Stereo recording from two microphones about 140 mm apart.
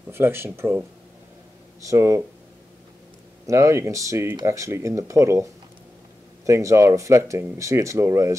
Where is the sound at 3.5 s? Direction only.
20° right (ahead or behind).